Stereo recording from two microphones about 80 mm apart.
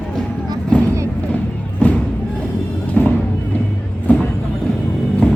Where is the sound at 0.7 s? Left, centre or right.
Centre.